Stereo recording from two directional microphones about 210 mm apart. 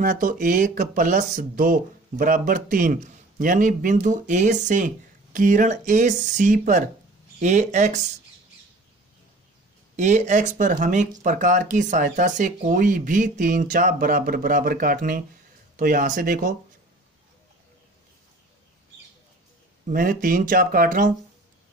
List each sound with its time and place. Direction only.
0.0 s speech: 40° right (ahead or behind)
9.9 s speech: 35° right (ahead or behind)
19.9 s speech: 40° right (ahead or behind)